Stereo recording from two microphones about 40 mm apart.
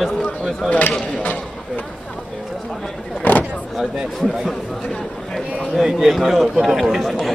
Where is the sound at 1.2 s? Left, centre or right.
Left.